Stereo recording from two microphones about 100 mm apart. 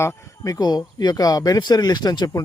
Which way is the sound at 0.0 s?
30° left (ahead or behind).